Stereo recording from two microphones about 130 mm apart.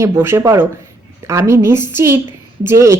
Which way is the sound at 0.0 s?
20° right (ahead or behind).